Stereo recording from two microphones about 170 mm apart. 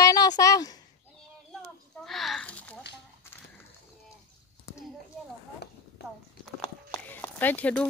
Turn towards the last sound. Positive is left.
turn(degrees=10)  # may be behind; listen again after turning